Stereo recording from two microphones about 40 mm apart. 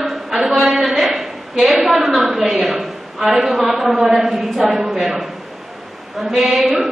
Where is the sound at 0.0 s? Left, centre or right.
Centre.